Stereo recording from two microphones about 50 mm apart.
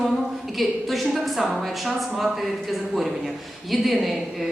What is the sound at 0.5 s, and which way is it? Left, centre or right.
A woman's voice, centre.